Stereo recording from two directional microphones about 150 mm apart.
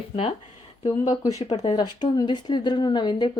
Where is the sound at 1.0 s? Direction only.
25° left (ahead or behind).